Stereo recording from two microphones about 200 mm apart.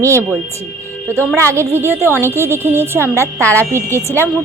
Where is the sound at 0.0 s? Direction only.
15° right (ahead or behind).